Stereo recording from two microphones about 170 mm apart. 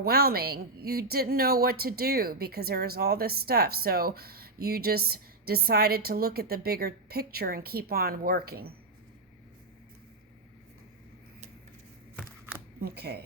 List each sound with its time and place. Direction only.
0.0 s a woman's voice: 65° right (ahead or behind)
12.8 s speech: 70° right (ahead or behind)